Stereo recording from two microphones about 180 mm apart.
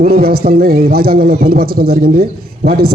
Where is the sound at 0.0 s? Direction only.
60° right (ahead or behind).